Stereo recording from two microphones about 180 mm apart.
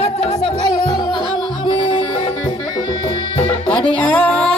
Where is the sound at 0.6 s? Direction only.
25° left (ahead or behind).